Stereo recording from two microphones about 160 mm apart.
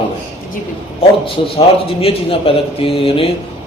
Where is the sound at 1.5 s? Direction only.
35° left (ahead or behind).